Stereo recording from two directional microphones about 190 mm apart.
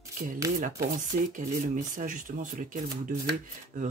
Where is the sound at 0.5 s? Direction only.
45° right (ahead or behind).